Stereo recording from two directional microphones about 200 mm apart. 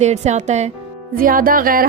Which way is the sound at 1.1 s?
45° right (ahead or behind).